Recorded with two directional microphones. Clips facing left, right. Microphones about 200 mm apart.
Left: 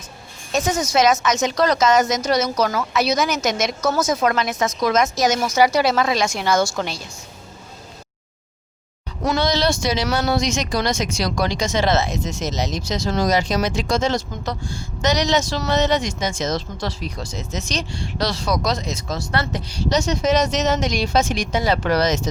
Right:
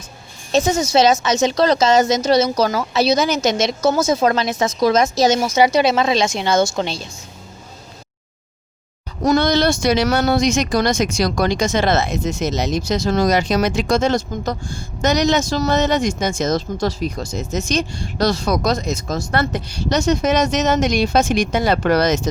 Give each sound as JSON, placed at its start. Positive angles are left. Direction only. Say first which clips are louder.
{"t": 0.5, "sound": "a woman's voice", "louder": "right 4 dB", "side_deg": -25}
{"t": 9.2, "sound": "speech", "louder": "right 4 dB", "side_deg": -50}